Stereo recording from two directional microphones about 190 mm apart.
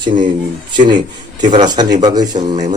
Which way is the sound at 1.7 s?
20° right (ahead or behind).